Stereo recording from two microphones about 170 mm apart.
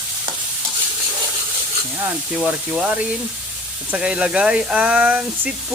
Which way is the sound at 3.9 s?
5° right (ahead or behind).